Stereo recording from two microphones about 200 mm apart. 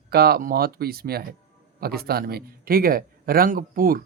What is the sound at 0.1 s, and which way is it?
A man's voice, 50° right (ahead or behind).